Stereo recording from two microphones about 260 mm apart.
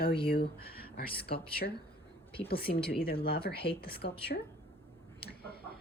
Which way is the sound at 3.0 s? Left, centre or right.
Left.